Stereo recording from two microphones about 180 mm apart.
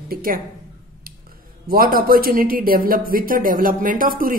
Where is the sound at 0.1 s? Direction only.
50° right (ahead or behind).